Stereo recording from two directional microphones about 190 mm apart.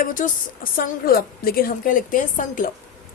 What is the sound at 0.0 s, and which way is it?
Speech, 45° left (ahead or behind).